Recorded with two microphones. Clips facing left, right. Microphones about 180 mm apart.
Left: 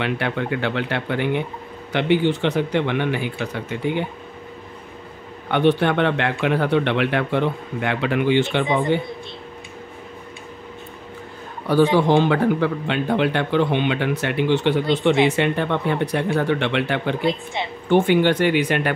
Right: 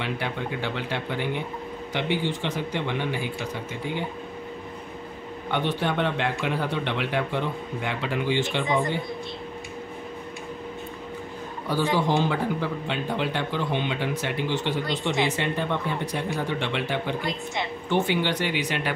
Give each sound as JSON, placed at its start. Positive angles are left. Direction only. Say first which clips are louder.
{"t": 0.0, "sound": "speech", "louder": "left 6 dB", "side_deg": 65}
{"t": 5.5, "sound": "speech", "louder": "left 8 dB", "side_deg": 65}
{"t": 11.7, "sound": "speech", "louder": "left 8 dB", "side_deg": 65}
{"t": 17.8, "sound": "speech", "louder": "left 9 dB", "side_deg": 55}